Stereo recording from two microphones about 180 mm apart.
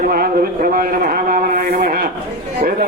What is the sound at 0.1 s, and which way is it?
Speech, 55° right (ahead or behind).